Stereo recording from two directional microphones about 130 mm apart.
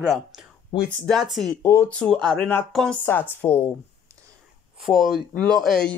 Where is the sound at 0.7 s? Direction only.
40° left (ahead or behind).